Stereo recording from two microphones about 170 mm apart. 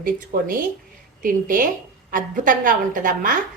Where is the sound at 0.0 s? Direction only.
55° right (ahead or behind).